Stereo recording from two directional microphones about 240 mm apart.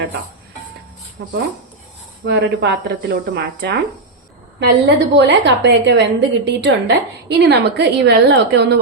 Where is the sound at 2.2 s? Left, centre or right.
Right.